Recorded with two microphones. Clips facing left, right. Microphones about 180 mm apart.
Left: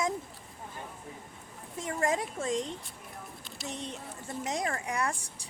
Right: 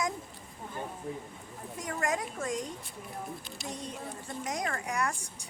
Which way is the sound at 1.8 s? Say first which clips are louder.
Left 2 dB; 25° left (ahead or behind).